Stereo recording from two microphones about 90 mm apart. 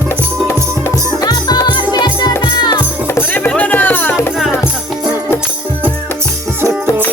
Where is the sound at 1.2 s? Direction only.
45° left (ahead or behind).